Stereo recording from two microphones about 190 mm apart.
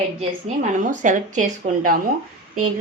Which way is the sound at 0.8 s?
40° right (ahead or behind).